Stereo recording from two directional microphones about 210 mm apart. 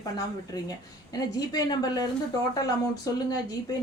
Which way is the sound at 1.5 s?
20° left (ahead or behind).